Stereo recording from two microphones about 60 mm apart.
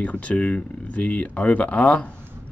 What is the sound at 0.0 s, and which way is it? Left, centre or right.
Speech, left.